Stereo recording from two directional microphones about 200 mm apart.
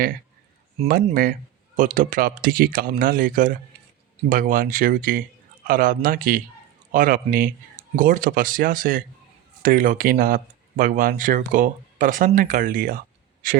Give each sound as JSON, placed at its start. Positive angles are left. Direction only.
{"t": 1.1, "sound": "speech", "side_deg": -45}